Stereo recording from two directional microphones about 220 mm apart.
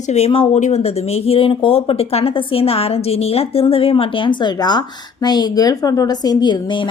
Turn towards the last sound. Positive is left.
turn(degrees=20)  # may be behind; listen again after turning